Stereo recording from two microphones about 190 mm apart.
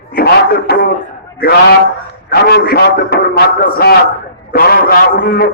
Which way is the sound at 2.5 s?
60° left (ahead or behind).